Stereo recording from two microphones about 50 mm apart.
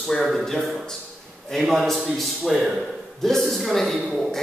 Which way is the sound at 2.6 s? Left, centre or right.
Centre.